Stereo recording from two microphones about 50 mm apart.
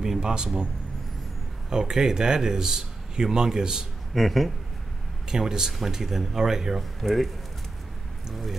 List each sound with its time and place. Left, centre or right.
0.0 s speech: centre
1.7 s a man's voice: centre
4.1 s speech: centre
5.3 s a man's voice: centre
8.3 s speech: centre